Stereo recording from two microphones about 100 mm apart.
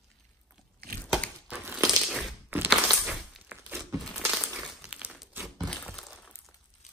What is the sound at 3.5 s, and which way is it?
Crumpling, 15° right (ahead or behind).